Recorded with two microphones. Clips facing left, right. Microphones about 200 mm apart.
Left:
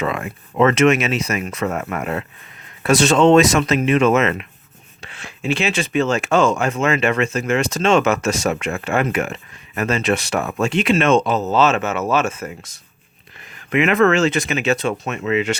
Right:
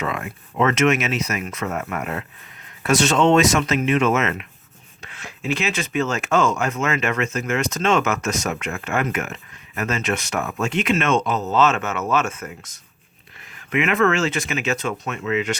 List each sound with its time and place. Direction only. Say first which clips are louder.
0.6 s speech: left 4 dB; 30° left (ahead or behind)